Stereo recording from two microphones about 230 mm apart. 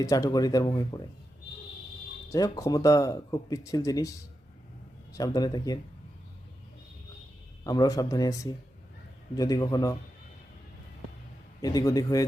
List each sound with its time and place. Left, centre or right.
0.0 s speech: centre
2.3 s speech: centre
5.1 s speech: centre
7.6 s speech: centre
11.6 s speech: centre